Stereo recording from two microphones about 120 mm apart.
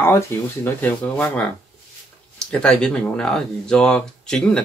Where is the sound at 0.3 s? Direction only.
20° left (ahead or behind).